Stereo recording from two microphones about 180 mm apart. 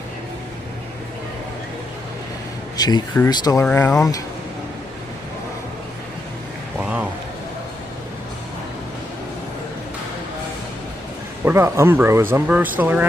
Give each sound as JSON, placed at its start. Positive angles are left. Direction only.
{"t": 2.7, "sound": "speech", "side_deg": 20}
{"t": 3.7, "sound": "speech", "side_deg": 10}
{"t": 11.4, "sound": "speech", "side_deg": -15}